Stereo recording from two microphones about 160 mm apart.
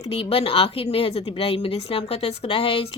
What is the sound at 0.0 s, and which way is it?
A woman's voice, 40° left (ahead or behind).